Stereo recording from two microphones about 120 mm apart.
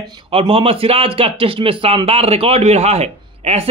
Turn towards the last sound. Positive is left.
turn(degrees=-60)  # may be behind; listen again after turning